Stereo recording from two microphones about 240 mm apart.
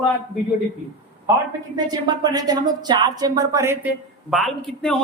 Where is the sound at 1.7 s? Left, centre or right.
Centre.